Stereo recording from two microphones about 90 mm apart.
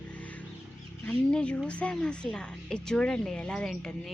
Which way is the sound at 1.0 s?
10° left (ahead or behind).